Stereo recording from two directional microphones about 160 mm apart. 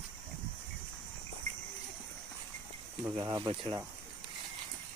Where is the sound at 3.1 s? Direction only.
30° right (ahead or behind).